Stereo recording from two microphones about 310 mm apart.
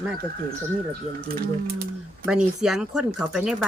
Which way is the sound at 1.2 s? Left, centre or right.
Right.